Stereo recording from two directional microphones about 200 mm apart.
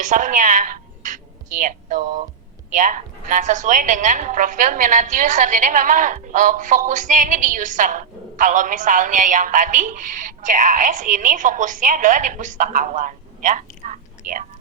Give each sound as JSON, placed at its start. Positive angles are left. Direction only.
{"t": 0.0, "sound": "a woman's voice", "side_deg": -40}